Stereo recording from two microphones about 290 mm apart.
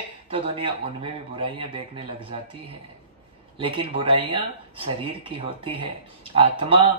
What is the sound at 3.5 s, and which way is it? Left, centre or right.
Speech, centre.